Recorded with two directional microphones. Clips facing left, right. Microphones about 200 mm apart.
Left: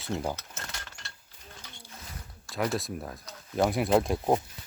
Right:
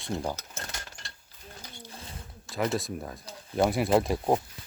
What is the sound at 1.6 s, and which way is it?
Wild animals, 30° right (ahead or behind).